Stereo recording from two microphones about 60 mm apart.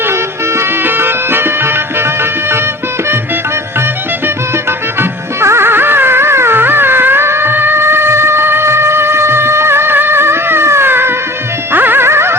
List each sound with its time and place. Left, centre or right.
0.1 s music: right
4.9 s music: right